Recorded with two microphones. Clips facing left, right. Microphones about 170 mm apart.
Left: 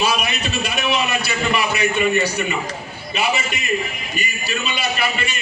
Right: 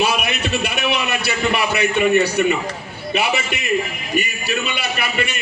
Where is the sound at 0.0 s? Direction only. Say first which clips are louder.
Right 1 dB; 60° right (ahead or behind).